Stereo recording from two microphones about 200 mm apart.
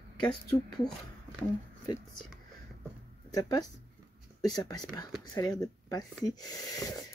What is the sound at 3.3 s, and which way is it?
A woman's voice, 20° left (ahead or behind).